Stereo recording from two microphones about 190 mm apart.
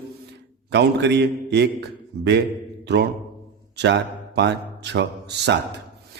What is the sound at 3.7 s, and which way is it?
A man's voice, 65° right (ahead or behind).